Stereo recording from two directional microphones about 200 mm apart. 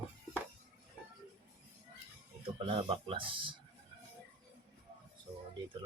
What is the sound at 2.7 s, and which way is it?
Speech, 25° right (ahead or behind).